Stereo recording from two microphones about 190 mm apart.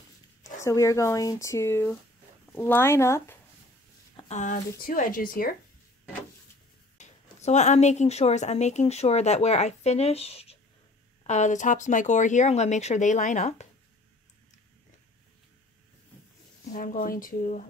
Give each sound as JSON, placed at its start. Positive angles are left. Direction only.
{"t": 0.6, "sound": "speech", "side_deg": 15}
{"t": 4.3, "sound": "speech", "side_deg": 40}
{"t": 7.0, "sound": "speech", "side_deg": 35}
{"t": 16.7, "sound": "speech", "side_deg": 45}